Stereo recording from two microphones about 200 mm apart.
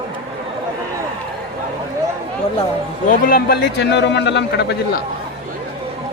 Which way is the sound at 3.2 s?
45° left (ahead or behind).